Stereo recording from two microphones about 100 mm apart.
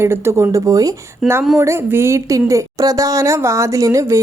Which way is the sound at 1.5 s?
30° right (ahead or behind).